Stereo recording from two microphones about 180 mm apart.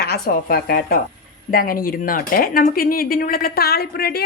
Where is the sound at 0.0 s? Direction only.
55° left (ahead or behind).